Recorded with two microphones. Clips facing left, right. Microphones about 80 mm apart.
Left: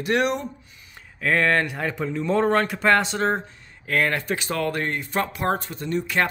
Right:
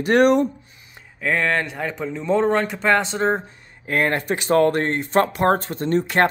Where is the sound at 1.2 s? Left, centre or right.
Centre.